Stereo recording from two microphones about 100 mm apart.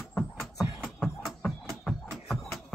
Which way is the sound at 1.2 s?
5° left (ahead or behind).